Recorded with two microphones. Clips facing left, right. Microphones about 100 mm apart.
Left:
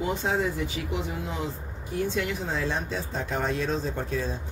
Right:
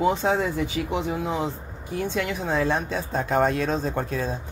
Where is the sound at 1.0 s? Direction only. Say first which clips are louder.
Right 6 dB; 65° right (ahead or behind).